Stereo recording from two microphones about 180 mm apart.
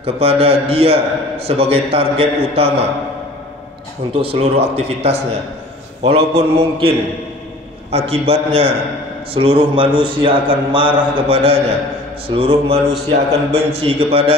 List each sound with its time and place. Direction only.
0.0 s a man's voice: 35° right (ahead or behind)
4.1 s a man's voice: 30° right (ahead or behind)
7.9 s a man's voice: 35° right (ahead or behind)